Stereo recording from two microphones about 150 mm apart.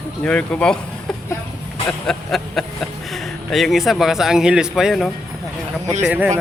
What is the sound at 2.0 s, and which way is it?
A man's voice, 5° left (ahead or behind).